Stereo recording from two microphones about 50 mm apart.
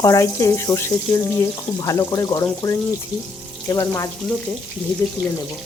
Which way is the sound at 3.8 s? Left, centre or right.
Left.